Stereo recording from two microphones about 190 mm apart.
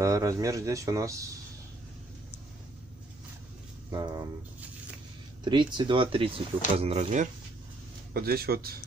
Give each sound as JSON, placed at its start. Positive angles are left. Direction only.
{"t": 0.0, "sound": "speech", "side_deg": -15}
{"t": 3.9, "sound": "speech", "side_deg": -20}
{"t": 5.4, "sound": "speech", "side_deg": -25}
{"t": 8.1, "sound": "speech", "side_deg": -50}